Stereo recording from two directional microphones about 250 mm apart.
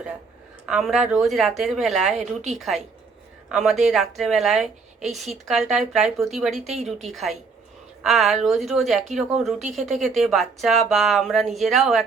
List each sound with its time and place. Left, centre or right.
0.6 s a woman's voice: centre
2.1 s speech: right
2.6 s a woman's voice: centre